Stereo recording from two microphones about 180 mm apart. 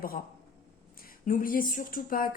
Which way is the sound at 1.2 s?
50° left (ahead or behind).